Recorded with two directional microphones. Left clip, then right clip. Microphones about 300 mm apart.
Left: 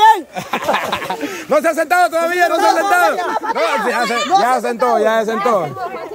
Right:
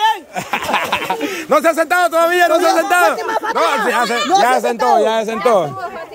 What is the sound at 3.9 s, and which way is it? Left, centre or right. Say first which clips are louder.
A man's voice: right 1 dB; centre.